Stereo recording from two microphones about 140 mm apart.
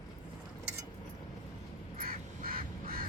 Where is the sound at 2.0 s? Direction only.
90° right.